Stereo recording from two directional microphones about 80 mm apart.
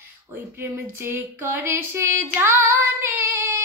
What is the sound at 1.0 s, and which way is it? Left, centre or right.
Female singing, right.